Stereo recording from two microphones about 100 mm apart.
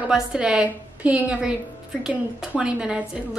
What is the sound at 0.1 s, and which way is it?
A woman's voice, 10° right (ahead or behind).